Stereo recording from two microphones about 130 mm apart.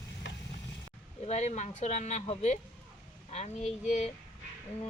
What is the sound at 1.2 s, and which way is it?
A woman's voice, 60° left (ahead or behind).